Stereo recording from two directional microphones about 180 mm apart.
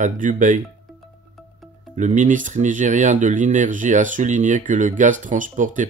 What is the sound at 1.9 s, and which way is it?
Speech, 45° right (ahead or behind).